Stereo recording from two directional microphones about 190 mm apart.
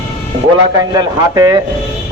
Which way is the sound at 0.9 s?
20° right (ahead or behind).